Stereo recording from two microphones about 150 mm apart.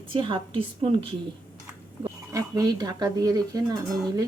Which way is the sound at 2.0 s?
25° right (ahead or behind).